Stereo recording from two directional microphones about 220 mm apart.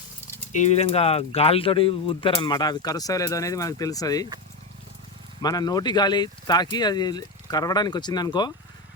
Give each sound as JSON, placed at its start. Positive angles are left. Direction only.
{"t": 0.5, "sound": "speech", "side_deg": 30}
{"t": 5.4, "sound": "speech", "side_deg": 15}